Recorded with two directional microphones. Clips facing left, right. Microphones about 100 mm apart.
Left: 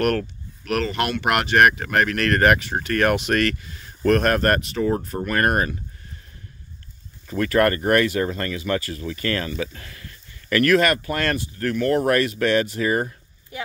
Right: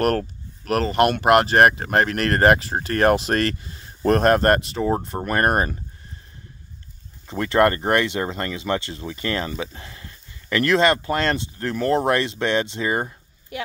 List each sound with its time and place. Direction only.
0.0 s speech: 35° right (ahead or behind)
7.2 s speech: 25° right (ahead or behind)